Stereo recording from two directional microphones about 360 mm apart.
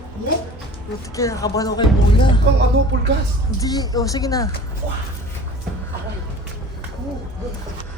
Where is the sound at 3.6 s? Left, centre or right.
Centre.